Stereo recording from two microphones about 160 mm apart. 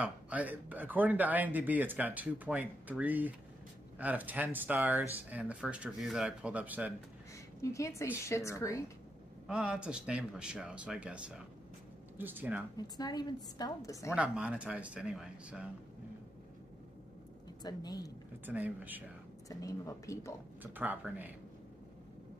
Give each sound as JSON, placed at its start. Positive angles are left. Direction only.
{"t": 0.0, "sound": "speech", "side_deg": -10}
{"t": 7.6, "sound": "a woman's voice", "side_deg": 20}
{"t": 9.5, "sound": "speech", "side_deg": -5}
{"t": 12.7, "sound": "a woman's voice", "side_deg": 25}
{"t": 14.1, "sound": "speech", "side_deg": -5}
{"t": 17.6, "sound": "a woman's voice", "side_deg": 25}
{"t": 18.4, "sound": "speech", "side_deg": -10}
{"t": 19.5, "sound": "a woman's voice", "side_deg": 20}
{"t": 20.6, "sound": "speech", "side_deg": -10}